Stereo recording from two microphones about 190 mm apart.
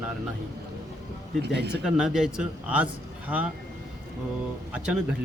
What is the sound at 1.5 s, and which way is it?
Speech, 60° right (ahead or behind).